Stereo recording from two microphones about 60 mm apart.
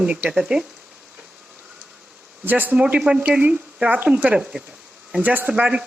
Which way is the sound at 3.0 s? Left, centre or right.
Centre.